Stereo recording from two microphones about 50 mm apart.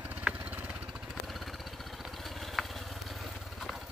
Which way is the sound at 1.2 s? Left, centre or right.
Centre.